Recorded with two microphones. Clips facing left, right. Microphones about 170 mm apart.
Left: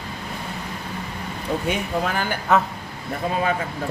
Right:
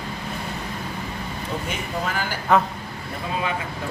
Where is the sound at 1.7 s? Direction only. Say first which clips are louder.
Left 3 dB; 60° left (ahead or behind).